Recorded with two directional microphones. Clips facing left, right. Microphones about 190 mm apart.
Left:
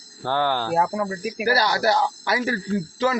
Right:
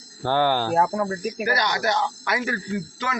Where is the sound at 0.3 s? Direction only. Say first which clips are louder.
Right 2 dB; 5° right (ahead or behind).